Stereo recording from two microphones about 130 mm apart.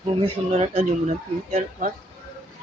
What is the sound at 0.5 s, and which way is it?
Speech, 55° right (ahead or behind).